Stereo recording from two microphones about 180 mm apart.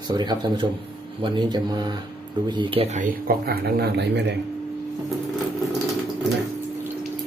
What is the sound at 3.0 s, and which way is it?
Speech, 55° right (ahead or behind).